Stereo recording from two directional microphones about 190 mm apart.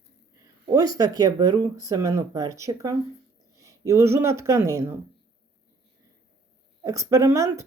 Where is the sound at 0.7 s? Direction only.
20° right (ahead or behind).